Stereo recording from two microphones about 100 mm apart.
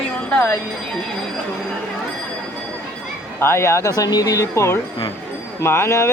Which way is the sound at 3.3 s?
25° left (ahead or behind).